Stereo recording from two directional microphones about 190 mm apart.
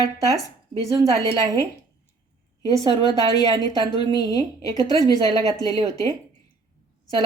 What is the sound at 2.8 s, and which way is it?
A woman's voice, 20° left (ahead or behind).